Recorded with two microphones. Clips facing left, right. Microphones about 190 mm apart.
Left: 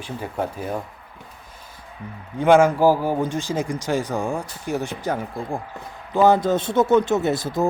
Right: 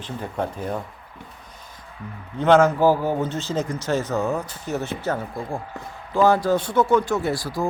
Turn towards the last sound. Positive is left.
turn(degrees=20)  # may be behind; listen again after turning